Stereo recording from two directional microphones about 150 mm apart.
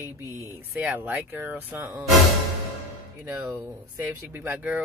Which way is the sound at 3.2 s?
15° right (ahead or behind).